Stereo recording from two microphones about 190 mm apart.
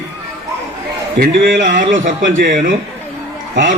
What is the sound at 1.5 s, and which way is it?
A man's voice, 45° right (ahead or behind).